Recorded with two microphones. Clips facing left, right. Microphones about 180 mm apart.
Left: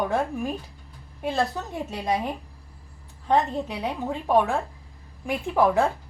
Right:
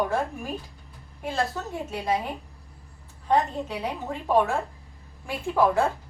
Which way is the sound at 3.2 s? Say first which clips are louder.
Left 1 dB; 15° left (ahead or behind).